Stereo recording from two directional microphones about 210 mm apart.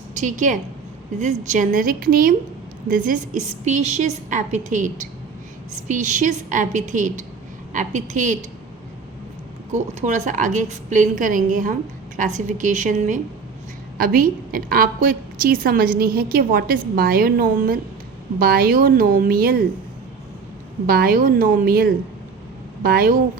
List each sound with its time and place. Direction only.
0.2 s a woman's voice: 35° right (ahead or behind)
9.7 s a woman's voice: 35° right (ahead or behind)
20.8 s a woman's voice: 45° right (ahead or behind)